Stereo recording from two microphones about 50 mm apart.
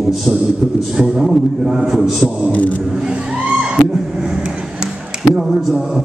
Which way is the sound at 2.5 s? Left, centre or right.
Left.